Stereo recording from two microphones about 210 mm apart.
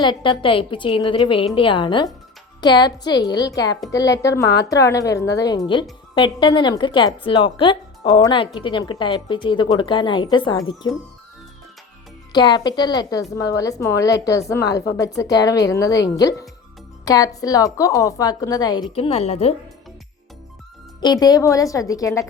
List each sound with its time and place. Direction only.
0.0 s a woman's voice: 20° left (ahead or behind)
12.3 s a woman's voice: 20° left (ahead or behind)
21.0 s a woman's voice: 20° left (ahead or behind)